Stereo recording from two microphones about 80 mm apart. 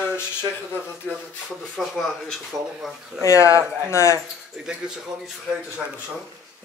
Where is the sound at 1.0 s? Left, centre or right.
Centre.